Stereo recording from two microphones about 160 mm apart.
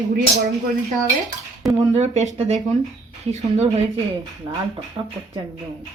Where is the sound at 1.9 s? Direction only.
45° right (ahead or behind).